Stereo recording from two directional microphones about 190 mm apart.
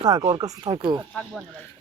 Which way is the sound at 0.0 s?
20° right (ahead or behind).